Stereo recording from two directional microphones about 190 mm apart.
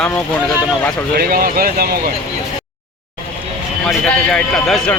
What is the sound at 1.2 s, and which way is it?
Speech, 50° right (ahead or behind).